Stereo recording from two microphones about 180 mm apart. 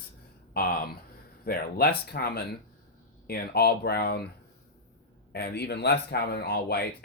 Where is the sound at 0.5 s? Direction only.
60° left (ahead or behind).